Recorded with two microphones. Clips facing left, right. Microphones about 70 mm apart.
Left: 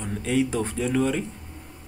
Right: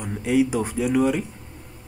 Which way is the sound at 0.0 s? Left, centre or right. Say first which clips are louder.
Right 3 dB; centre.